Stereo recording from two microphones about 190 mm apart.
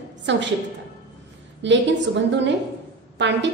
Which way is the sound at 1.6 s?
70° right (ahead or behind).